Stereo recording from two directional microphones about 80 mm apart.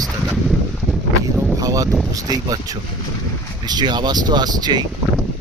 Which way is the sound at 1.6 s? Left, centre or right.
Right.